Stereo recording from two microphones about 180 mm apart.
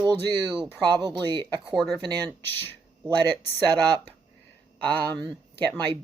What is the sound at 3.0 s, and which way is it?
Speech, 25° right (ahead or behind).